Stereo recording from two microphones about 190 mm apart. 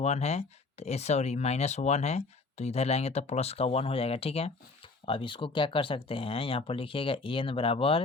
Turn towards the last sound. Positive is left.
turn(degrees=30)  # may be behind; listen again after turning